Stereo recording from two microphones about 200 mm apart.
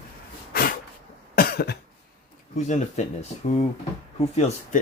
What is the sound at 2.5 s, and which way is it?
Speech, 35° left (ahead or behind).